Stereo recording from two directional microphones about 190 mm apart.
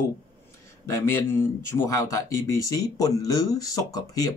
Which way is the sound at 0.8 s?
15° left (ahead or behind).